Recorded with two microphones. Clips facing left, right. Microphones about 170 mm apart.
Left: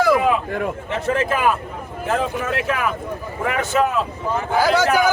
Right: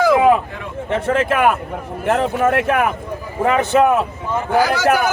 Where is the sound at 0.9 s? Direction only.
60° right (ahead or behind).